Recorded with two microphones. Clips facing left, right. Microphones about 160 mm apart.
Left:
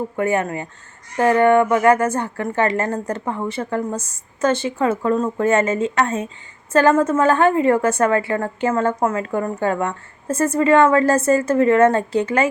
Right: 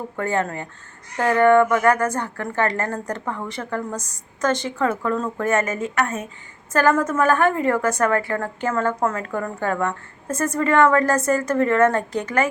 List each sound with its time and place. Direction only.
0.2 s a woman's voice: 15° left (ahead or behind)